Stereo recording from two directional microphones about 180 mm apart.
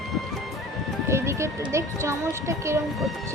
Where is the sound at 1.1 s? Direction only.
15° right (ahead or behind).